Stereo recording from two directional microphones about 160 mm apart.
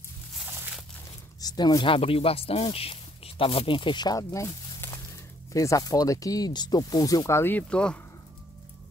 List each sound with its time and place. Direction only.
1.4 s speech: 25° left (ahead or behind); by 8.0 s 5° left (ahead or behind)